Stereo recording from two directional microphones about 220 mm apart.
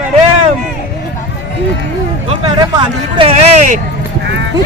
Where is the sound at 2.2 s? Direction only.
25° right (ahead or behind).